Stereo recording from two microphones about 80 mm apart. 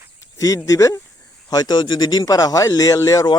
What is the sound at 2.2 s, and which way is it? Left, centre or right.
Speech, left.